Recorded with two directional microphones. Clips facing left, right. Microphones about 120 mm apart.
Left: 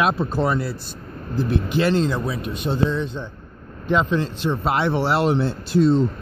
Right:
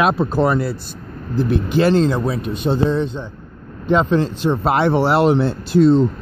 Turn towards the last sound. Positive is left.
turn(degrees=-65)  # may be behind; listen again after turning